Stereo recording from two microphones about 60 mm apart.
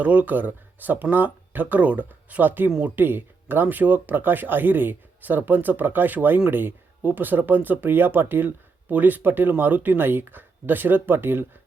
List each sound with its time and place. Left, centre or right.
0.0 s speech: right